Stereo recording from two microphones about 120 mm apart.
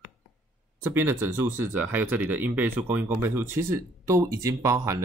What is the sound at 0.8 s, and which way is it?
Speech, 20° right (ahead or behind).